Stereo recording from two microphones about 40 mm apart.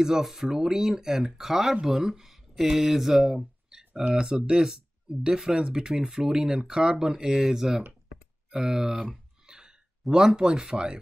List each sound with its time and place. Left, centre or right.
0.0 s speech: centre
5.1 s speech: centre
5.5 s speech: centre
9.5 s a sound: centre
10.1 s speech: centre